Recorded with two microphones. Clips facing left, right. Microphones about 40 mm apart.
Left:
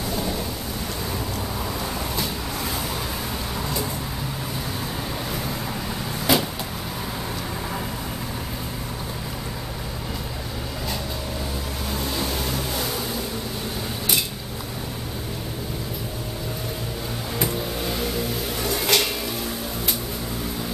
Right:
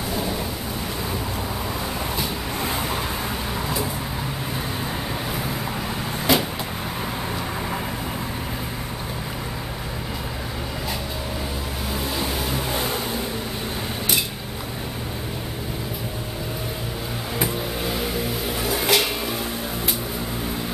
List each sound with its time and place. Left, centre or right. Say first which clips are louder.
0.1 s thunder: right 1 dB; centre
2.6 s vehicle: right 4 dB; right
6.3 s vehicle: right 1 dB; centre
12.7 s vehicle: right 2 dB; right
17.4 s vehicle: right 1 dB; centre